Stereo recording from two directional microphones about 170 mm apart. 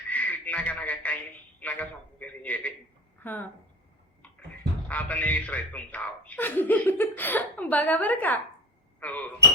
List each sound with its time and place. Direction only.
0.1 s speech: 10° left (ahead or behind)
4.9 s a man's voice: 10° left (ahead or behind)